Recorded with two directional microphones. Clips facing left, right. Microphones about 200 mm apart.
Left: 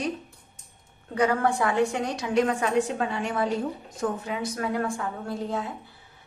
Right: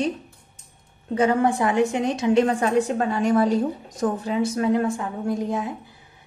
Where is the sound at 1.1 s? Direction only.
20° right (ahead or behind).